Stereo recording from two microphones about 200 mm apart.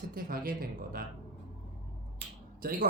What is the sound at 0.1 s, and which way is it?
Speech, 45° right (ahead or behind).